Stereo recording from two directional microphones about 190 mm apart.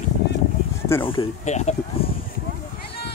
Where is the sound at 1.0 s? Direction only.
30° left (ahead or behind).